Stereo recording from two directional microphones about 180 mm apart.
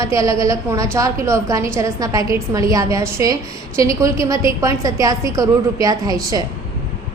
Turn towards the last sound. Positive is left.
turn(degrees=-20)  # may be behind; listen again after turning